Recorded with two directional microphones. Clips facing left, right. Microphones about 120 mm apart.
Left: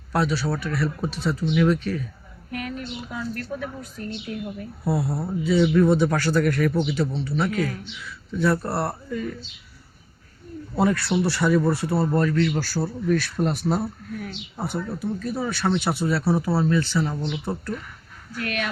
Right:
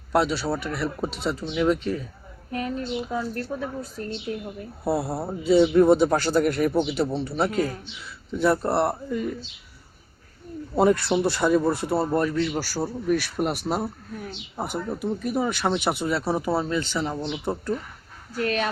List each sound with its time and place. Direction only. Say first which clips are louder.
0.1 s speech: right 1 dB; 25° right (ahead or behind)
10.8 s speech: right 2 dB; 20° right (ahead or behind)
18.3 s speech: right 4 dB; 30° right (ahead or behind)